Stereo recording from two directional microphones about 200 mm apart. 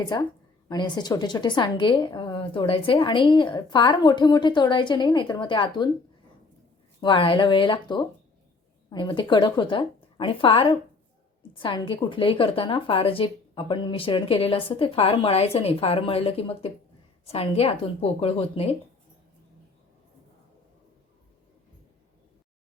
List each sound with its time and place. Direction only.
0.0 s a woman's voice: 20° left (ahead or behind)
7.0 s a woman's voice: 25° left (ahead or behind)